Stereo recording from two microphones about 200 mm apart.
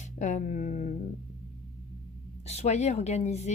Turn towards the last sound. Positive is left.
turn(degrees=35)  # may be behind; listen again after turning